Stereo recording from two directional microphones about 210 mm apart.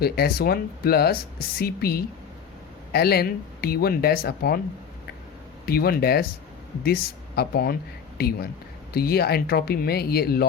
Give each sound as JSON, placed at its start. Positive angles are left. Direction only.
{"t": 0.0, "sound": "speech", "side_deg": 45}
{"t": 5.6, "sound": "speech", "side_deg": 45}
{"t": 8.9, "sound": "speech", "side_deg": 50}